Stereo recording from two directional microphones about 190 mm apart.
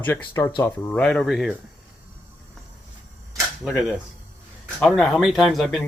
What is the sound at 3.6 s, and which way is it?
A woman's voice, 5° right (ahead or behind).